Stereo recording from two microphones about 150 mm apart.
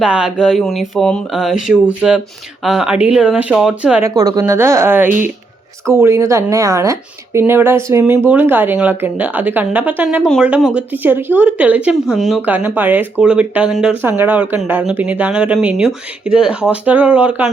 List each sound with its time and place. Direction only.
0.0 s speech: 5° right (ahead or behind)
4.1 s speech: 25° right (ahead or behind)